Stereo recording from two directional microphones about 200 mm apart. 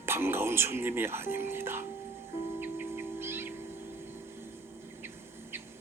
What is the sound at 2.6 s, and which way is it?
Owl, 10° right (ahead or behind).